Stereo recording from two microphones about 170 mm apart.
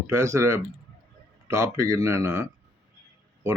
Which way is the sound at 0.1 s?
15° right (ahead or behind).